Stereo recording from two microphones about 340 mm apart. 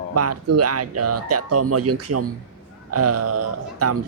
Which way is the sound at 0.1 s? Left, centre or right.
Right.